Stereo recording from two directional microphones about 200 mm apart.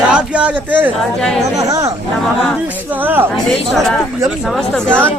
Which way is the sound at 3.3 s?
Centre (ahead or behind).